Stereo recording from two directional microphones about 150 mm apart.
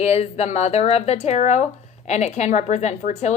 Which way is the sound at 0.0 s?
45° left (ahead or behind).